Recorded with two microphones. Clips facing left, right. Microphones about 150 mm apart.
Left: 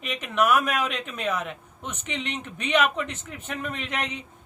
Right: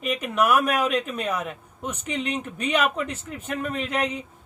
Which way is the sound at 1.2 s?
10° right (ahead or behind).